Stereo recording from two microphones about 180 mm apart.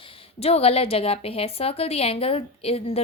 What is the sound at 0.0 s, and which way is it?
A woman's voice, 35° left (ahead or behind).